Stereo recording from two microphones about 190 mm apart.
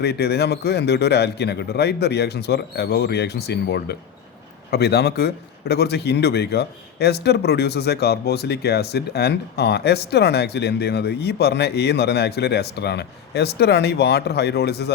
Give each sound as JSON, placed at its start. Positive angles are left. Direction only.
{"t": 0.0, "sound": "speech", "side_deg": 60}